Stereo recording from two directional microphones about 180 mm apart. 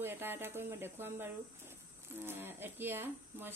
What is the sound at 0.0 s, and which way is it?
Speech, 10° right (ahead or behind).